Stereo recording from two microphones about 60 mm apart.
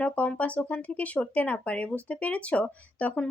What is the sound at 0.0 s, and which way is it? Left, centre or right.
Speech, left.